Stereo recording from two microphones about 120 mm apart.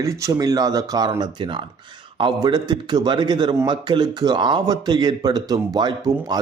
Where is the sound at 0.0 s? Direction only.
25° right (ahead or behind).